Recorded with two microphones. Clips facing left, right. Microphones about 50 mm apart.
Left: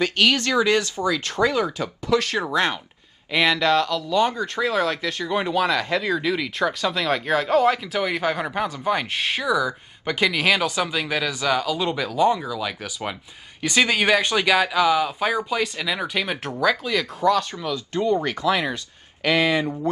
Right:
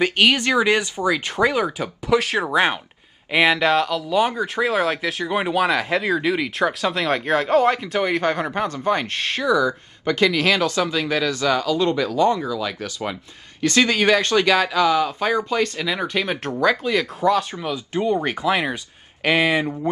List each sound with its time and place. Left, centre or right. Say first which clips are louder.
0.0 s speech: right 2 dB; right